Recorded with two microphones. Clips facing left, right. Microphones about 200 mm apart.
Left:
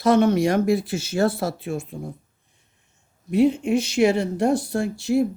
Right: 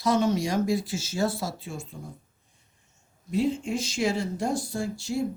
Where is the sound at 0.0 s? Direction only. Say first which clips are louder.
Left 7 dB; 60° left (ahead or behind).